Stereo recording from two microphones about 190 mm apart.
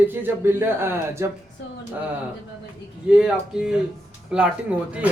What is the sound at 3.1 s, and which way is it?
Speech, 5° right (ahead or behind).